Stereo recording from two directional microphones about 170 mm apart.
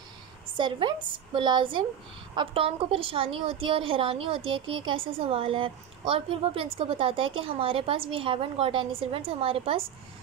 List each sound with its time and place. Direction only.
0.6 s a woman's voice: 30° right (ahead or behind)